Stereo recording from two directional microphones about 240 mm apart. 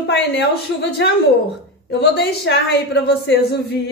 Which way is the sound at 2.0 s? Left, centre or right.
Left.